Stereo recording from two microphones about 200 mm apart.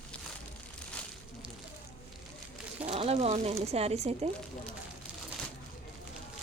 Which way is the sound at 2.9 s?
30° right (ahead or behind).